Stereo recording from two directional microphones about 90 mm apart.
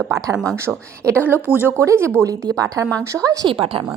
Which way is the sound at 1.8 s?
30° right (ahead or behind).